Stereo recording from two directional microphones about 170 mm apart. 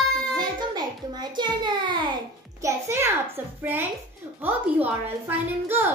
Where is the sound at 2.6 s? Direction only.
15° right (ahead or behind).